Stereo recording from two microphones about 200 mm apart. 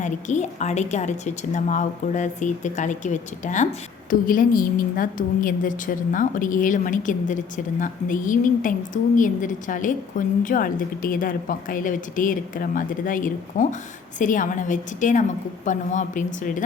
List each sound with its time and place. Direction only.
0.0 s a woman's voice: 35° left (ahead or behind)